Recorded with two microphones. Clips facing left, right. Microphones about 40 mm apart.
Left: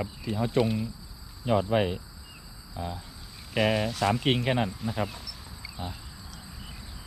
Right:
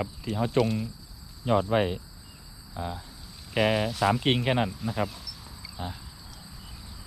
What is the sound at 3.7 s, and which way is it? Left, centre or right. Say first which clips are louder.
Speech: right 2 dB; centre.